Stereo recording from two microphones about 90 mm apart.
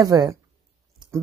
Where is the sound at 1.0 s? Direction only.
50° right (ahead or behind).